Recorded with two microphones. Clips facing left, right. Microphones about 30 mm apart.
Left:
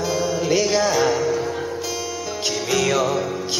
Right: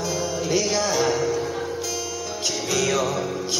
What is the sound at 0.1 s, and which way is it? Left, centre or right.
Music, centre.